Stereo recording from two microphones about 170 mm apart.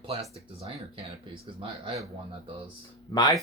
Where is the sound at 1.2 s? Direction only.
30° right (ahead or behind).